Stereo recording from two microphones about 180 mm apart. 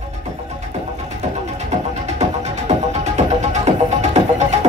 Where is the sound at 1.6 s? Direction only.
40° right (ahead or behind).